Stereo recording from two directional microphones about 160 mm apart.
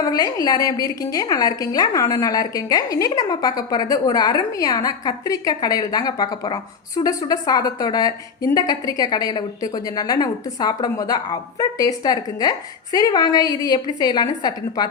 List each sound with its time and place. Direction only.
0.0 s a woman's voice: 25° left (ahead or behind)